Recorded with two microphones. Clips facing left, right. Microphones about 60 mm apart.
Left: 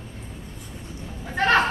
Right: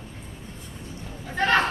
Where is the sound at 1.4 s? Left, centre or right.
Left.